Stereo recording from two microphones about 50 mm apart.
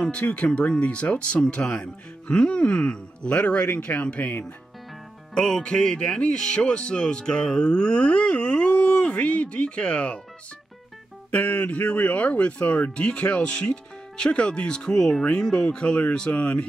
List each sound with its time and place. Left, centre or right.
0.0 s speech: left
5.3 s speech: centre
11.3 s speech: left